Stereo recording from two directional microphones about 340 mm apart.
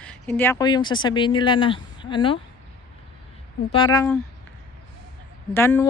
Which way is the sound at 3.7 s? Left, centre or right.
Centre.